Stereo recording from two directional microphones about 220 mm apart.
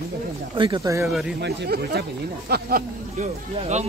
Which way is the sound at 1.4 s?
50° right (ahead or behind).